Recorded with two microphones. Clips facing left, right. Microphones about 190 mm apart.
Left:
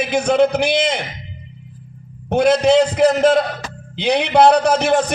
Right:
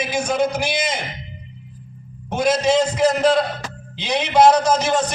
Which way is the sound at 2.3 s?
60° left (ahead or behind).